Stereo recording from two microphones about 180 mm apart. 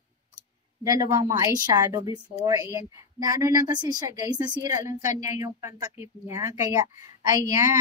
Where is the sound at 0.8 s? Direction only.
20° right (ahead or behind).